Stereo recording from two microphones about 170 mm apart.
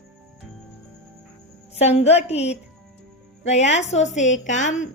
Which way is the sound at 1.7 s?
40° left (ahead or behind).